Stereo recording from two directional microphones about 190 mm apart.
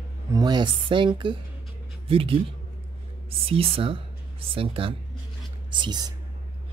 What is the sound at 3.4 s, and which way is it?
Speech, 30° right (ahead or behind).